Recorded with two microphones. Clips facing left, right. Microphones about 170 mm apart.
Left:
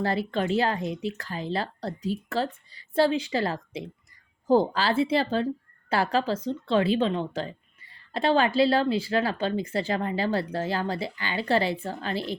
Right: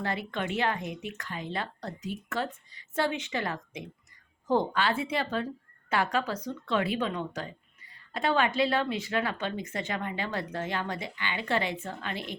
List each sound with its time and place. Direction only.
0.0 s speech: 35° left (ahead or behind)